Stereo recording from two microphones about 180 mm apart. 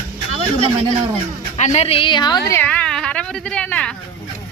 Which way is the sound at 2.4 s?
10° left (ahead or behind).